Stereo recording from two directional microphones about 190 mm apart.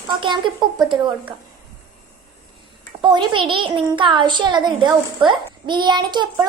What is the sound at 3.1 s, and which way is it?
A woman's voice, 25° right (ahead or behind).